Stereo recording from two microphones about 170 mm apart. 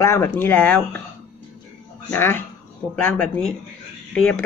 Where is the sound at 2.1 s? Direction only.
15° left (ahead or behind).